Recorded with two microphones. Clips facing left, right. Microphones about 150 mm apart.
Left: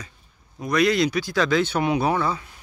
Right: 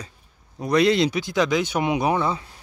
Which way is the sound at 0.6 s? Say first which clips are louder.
Right 2 dB; 30° right (ahead or behind).